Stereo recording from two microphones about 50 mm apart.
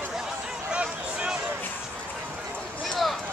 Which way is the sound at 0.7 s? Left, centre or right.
Right.